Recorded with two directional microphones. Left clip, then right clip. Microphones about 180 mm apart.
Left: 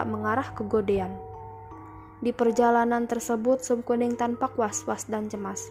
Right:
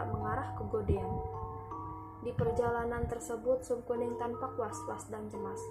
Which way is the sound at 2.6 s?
50° left (ahead or behind).